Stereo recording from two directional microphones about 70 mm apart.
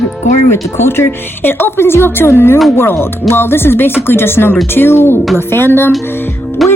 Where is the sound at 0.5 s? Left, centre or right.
Left.